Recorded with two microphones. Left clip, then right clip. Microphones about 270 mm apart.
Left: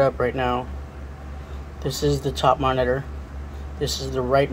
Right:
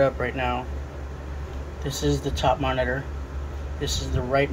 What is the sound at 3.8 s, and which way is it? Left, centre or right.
Speech, left.